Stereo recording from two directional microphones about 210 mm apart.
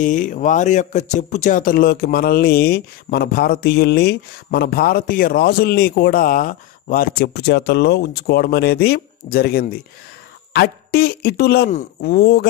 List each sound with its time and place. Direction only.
0.0 s speech: 40° left (ahead or behind)